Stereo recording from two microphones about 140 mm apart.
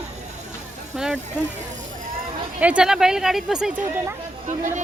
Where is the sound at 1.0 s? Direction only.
5° right (ahead or behind).